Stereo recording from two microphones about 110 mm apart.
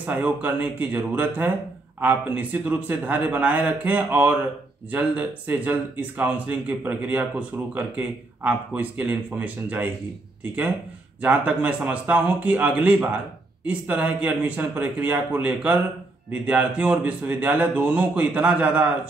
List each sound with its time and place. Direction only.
0.0 s a man's voice: 15° right (ahead or behind)
11.1 s a man's voice: 15° right (ahead or behind)